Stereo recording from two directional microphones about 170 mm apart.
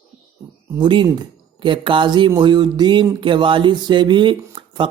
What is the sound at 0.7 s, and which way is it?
Speech, 25° right (ahead or behind).